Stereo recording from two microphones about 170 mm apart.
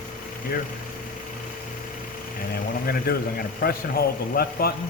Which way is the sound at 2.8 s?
60° left (ahead or behind).